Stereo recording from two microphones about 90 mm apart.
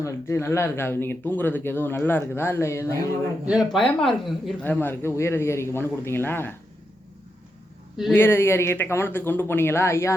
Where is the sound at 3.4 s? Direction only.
10° right (ahead or behind).